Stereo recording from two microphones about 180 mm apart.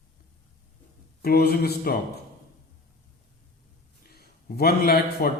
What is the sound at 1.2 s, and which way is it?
Speech, 60° left (ahead or behind).